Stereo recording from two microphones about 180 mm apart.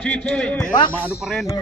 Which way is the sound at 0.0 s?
5° left (ahead or behind).